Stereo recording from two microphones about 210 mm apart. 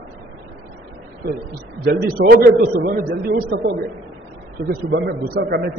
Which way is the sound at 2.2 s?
50° right (ahead or behind).